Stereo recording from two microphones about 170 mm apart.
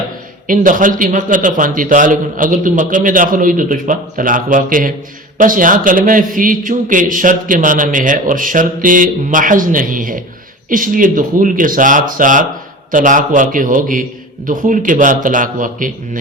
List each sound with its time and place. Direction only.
0.4 s a man's voice: 50° right (ahead or behind)